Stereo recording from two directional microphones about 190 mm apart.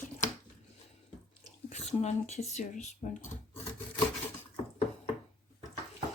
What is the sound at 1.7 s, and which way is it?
Speech, 35° left (ahead or behind).